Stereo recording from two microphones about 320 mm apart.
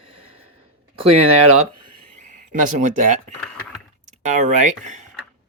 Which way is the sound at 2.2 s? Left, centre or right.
Right.